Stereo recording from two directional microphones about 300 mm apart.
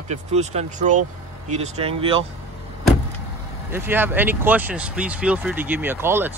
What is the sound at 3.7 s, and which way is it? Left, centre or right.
Speech, centre.